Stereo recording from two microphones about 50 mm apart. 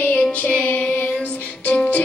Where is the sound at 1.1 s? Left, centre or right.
Left.